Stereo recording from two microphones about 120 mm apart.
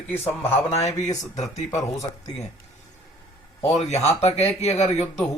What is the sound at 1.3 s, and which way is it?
Speech, 75° left (ahead or behind).